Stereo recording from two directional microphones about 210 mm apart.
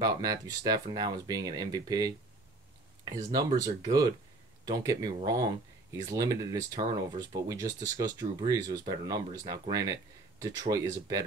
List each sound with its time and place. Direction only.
0.0 s speech: 15° right (ahead or behind)